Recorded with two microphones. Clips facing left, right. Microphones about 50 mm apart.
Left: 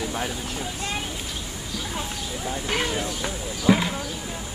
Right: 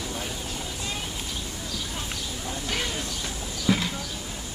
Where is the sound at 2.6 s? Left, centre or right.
Left.